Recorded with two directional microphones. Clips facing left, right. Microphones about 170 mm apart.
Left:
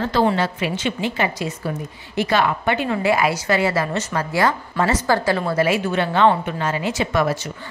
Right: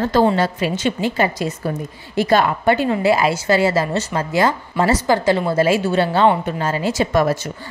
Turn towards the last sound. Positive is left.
turn(degrees=-40)  # may be behind; listen again after turning